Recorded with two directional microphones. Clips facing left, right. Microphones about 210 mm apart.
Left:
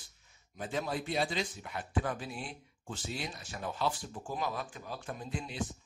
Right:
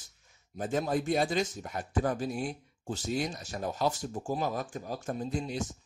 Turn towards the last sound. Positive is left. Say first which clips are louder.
# right 5 dB
turn(degrees=-40)  # may be behind; listen again after turning